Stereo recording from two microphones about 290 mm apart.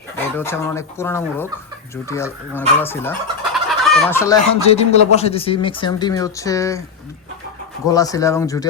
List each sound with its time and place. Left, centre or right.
0.3 s speech: centre
2.6 s chicken: centre
4.6 s speech: left
7.9 s speech: centre